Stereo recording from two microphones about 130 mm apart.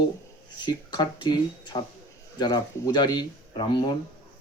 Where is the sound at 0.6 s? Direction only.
35° left (ahead or behind).